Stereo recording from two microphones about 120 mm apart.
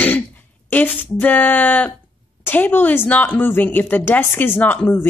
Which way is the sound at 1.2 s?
15° left (ahead or behind).